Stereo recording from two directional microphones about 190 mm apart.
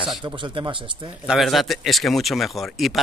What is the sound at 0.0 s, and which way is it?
Speech, 25° right (ahead or behind).